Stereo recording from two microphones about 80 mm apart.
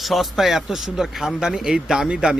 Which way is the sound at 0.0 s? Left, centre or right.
Centre.